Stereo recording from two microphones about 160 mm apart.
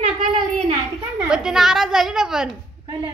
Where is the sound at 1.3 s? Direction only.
5° right (ahead or behind).